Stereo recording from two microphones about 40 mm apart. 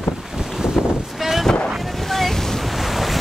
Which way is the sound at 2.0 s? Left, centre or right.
Centre.